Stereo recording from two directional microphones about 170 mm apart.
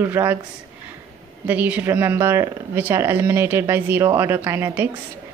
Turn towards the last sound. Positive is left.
turn(degrees=-15)  # may be behind; listen again after turning